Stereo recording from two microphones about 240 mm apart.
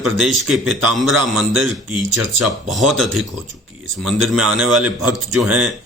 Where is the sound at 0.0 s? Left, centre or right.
Centre.